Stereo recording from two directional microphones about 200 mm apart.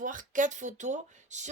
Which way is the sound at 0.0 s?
40° right (ahead or behind).